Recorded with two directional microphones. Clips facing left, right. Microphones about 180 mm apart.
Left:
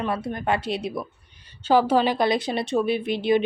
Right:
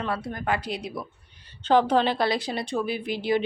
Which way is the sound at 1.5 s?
10° left (ahead or behind).